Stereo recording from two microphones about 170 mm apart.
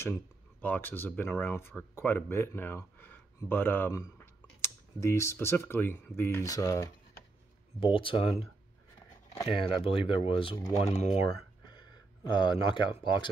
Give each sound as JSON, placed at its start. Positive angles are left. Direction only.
{"t": 0.0, "sound": "speech", "side_deg": 10}
{"t": 7.8, "sound": "speech", "side_deg": 30}
{"t": 9.9, "sound": "speech", "side_deg": 30}